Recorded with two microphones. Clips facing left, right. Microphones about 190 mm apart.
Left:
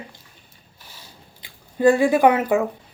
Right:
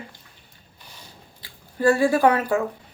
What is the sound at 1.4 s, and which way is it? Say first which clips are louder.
Speech: left 4 dB; 20° left (ahead or behind).